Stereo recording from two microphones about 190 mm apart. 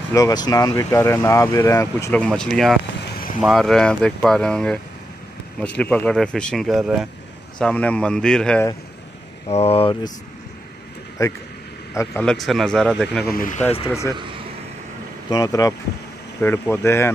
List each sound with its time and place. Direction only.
0.1 s speech: 20° left (ahead or behind)
2.2 s speech: 5° left (ahead or behind)
9.5 s speech: 30° left (ahead or behind)
11.2 s speech: 15° left (ahead or behind)
12.3 s speech: centre (ahead or behind)
13.3 s speech: 45° left (ahead or behind)
15.2 s speech: 20° left (ahead or behind)